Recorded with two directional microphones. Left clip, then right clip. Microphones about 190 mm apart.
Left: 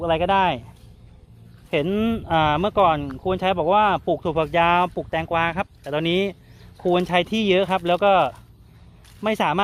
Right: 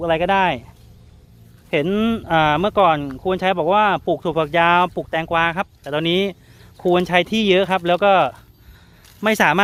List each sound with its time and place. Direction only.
0.0 s speech: 25° right (ahead or behind)
1.7 s speech: 30° right (ahead or behind)